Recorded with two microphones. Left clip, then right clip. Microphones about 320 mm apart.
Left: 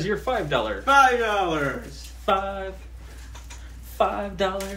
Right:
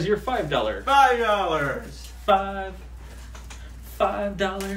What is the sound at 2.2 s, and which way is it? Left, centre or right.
Speech, centre.